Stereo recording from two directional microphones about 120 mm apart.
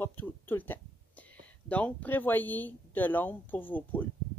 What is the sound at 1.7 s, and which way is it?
Speech, 10° left (ahead or behind).